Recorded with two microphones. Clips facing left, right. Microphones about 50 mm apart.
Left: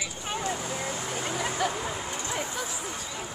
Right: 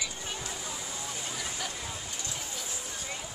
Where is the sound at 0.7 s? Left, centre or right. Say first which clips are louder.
Left 7 dB; left.